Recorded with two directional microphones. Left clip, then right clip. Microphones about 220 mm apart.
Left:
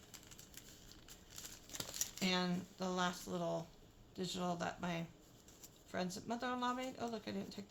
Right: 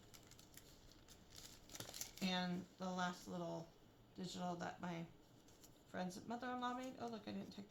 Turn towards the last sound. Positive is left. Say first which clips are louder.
# left 6 dB
turn(degrees=40)  # may be behind; listen again after turning